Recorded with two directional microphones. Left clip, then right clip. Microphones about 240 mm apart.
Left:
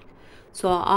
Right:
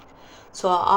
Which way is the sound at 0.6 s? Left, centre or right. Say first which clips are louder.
Right 2 dB; left.